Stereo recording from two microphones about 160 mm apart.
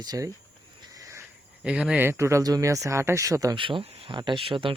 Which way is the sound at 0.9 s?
20° right (ahead or behind).